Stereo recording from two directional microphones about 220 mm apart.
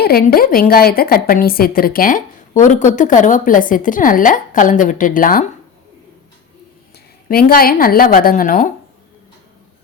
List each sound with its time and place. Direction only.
0.0 s a woman's voice: 45° left (ahead or behind)
7.3 s a woman's voice: 40° left (ahead or behind)